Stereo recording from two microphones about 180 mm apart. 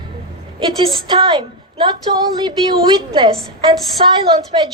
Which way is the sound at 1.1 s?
25° right (ahead or behind).